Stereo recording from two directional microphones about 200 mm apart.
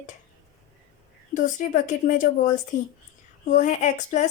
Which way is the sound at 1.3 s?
40° left (ahead or behind).